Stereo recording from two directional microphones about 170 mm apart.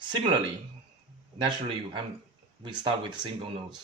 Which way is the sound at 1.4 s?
30° right (ahead or behind).